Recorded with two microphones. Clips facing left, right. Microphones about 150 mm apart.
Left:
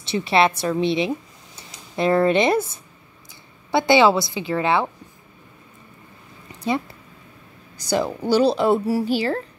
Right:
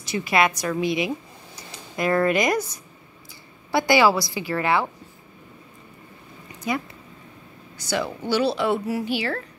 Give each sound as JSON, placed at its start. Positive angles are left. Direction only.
{"t": 0.0, "sound": "a woman's voice", "side_deg": 30}
{"t": 6.7, "sound": "a woman's voice", "side_deg": 30}
{"t": 7.8, "sound": "a woman's voice", "side_deg": 40}